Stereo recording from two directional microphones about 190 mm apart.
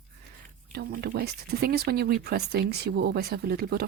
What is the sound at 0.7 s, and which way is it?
Speech, 55° right (ahead or behind).